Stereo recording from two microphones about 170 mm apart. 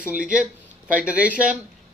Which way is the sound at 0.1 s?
5° right (ahead or behind).